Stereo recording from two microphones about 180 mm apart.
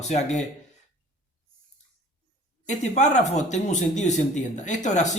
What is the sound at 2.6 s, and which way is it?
Speech, 40° left (ahead or behind).